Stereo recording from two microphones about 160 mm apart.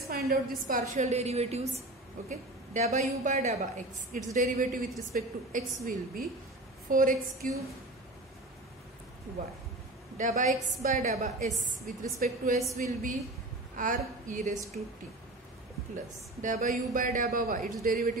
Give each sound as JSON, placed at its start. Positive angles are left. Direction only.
{"t": 0.0, "sound": "a sound", "side_deg": -75}
{"t": 0.7, "sound": "a woman's voice", "side_deg": -55}
{"t": 10.1, "sound": "a woman's voice", "side_deg": -50}
{"t": 11.8, "sound": "speech", "side_deg": -60}
{"t": 12.7, "sound": "a woman's voice", "side_deg": -50}
{"t": 16.3, "sound": "speech", "side_deg": -50}